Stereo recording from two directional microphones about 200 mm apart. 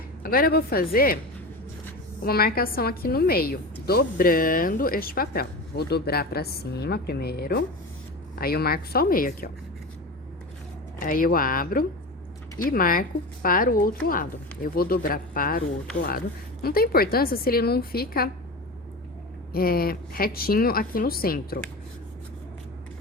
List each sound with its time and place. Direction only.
0.2 s a woman's voice: 45° left (ahead or behind)
2.2 s a woman's voice: 50° left (ahead or behind)
11.0 s a woman's voice: 45° left (ahead or behind)
19.5 s a woman's voice: 50° left (ahead or behind)